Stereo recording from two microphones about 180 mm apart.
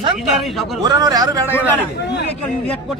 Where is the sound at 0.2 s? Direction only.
Centre (ahead or behind).